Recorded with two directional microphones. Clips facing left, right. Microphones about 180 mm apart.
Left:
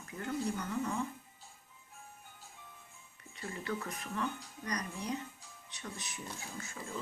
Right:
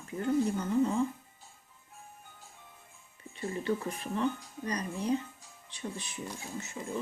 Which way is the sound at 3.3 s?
25° right (ahead or behind).